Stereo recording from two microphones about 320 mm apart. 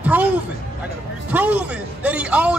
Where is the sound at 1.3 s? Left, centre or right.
Centre.